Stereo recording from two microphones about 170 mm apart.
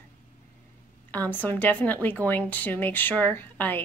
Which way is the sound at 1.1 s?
10° left (ahead or behind).